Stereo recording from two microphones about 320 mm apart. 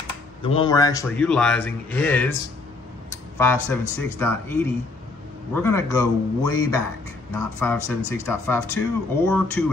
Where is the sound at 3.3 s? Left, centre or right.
Centre.